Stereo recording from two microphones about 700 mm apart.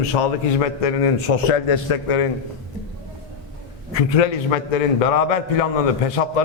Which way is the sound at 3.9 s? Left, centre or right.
Left.